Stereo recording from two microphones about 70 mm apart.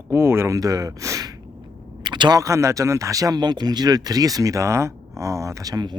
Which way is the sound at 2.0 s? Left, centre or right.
Right.